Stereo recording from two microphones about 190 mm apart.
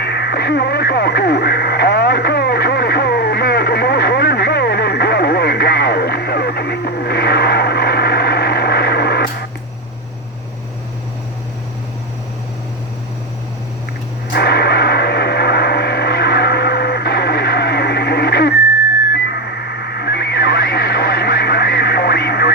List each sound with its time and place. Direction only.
0.0 s radio: 60° left (ahead or behind)
14.3 s a sound: 60° left (ahead or behind)
19.1 s radio: 60° left (ahead or behind)